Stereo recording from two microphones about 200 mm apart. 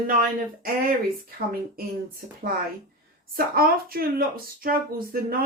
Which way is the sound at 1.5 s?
45° right (ahead or behind).